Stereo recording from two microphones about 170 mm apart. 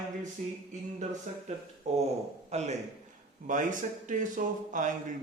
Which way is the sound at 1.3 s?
45° right (ahead or behind).